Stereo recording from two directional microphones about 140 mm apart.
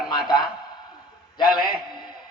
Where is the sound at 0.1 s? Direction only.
35° left (ahead or behind).